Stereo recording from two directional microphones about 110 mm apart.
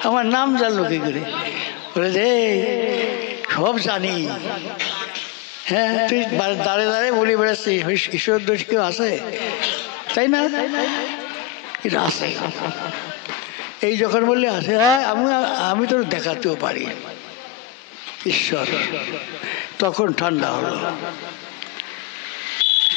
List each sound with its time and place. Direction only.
0.0 s a man's voice: 25° left (ahead or behind)
18.2 s a man's voice: 25° left (ahead or behind)
22.6 s vehicle: 20° left (ahead or behind)